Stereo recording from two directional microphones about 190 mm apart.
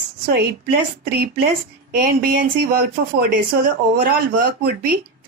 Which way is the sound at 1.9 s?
50° right (ahead or behind).